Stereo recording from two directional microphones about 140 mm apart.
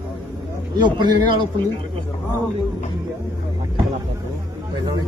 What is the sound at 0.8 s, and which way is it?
Speech, 35° right (ahead or behind).